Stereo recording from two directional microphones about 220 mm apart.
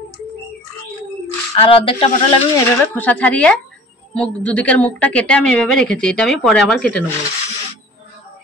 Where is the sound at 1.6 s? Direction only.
25° left (ahead or behind).